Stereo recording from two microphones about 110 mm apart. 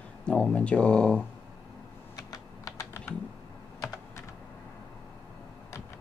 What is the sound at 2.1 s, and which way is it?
Typing, 35° left (ahead or behind).